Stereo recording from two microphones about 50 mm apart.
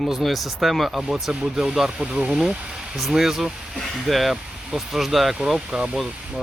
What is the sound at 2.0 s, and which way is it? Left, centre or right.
Speech, right.